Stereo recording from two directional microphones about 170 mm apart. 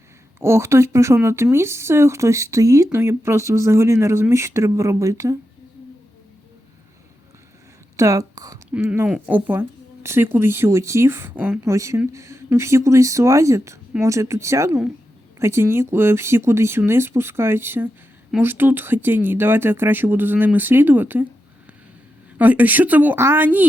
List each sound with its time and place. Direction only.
0.3 s speech: 15° right (ahead or behind)
7.9 s speech: 20° right (ahead or behind)
8.7 s speech: 10° right (ahead or behind)
22.4 s speech: 10° right (ahead or behind)